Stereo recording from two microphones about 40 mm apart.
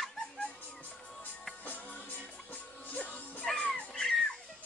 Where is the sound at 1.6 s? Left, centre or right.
Left.